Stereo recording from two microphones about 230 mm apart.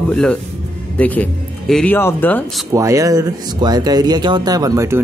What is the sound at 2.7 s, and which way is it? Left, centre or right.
Speech, centre.